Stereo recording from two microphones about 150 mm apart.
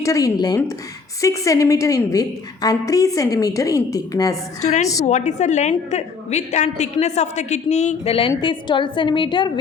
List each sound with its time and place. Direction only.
0.0 s a woman's voice: 20° left (ahead or behind)
4.6 s a woman's voice: 50° left (ahead or behind); by 9.5 s 35° left (ahead or behind)